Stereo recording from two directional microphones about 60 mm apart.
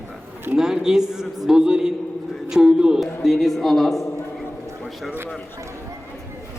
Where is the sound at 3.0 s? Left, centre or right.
Centre.